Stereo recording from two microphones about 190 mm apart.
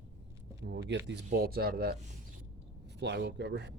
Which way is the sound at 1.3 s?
50° right (ahead or behind).